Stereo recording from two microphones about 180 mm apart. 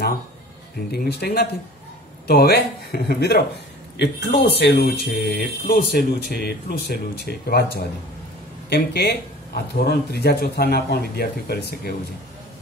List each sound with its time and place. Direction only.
0.9 s speech: 60° left (ahead or behind)